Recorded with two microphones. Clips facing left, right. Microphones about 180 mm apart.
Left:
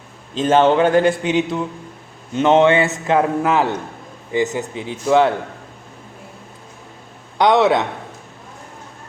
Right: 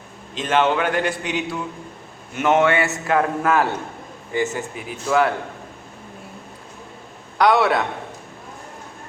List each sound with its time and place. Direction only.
0.3 s a man's voice: 30° left (ahead or behind)
7.3 s a man's voice: 20° left (ahead or behind)